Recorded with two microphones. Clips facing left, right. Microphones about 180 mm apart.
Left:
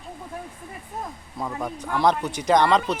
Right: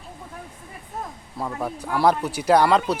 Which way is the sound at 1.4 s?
5° right (ahead or behind).